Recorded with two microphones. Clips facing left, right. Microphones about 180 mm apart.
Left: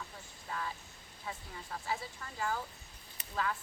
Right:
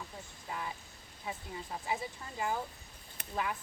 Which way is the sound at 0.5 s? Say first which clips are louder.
Even; 20° right (ahead or behind).